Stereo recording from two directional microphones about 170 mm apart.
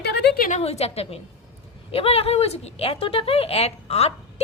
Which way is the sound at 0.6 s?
35° left (ahead or behind).